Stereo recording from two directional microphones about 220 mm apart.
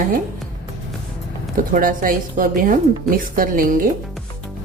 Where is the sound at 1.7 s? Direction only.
40° right (ahead or behind).